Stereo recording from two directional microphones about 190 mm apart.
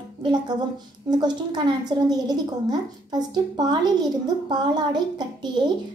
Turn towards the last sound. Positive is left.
turn(degrees=-25)  # may be behind; listen again after turning